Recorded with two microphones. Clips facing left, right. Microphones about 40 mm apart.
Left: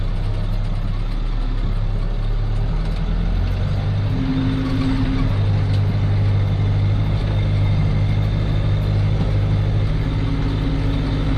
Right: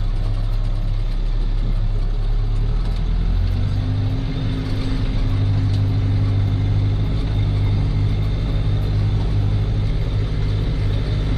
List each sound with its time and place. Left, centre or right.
4.4 s vehicle: centre
10.4 s vehicle: centre